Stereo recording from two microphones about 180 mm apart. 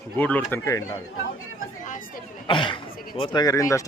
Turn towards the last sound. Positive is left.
turn(degrees=20)  # may be behind; listen again after turning